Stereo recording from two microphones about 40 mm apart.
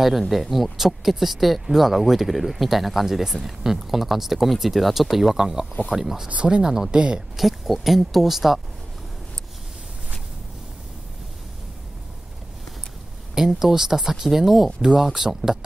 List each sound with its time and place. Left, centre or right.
0.3 s speech: centre
6.3 s speech: right
6.6 s speech: centre
6.9 s speech: right
7.3 s speech: centre
13.3 s speech: centre